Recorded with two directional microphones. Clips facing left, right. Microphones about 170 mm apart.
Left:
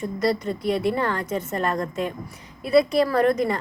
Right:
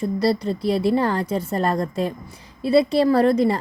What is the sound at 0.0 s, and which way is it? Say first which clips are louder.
A woman's voice: right 3 dB; 35° right (ahead or behind).